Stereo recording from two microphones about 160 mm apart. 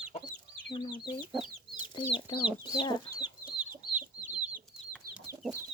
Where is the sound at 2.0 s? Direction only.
30° left (ahead or behind).